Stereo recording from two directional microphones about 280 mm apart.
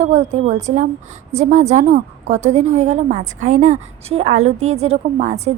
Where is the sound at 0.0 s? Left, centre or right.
Right.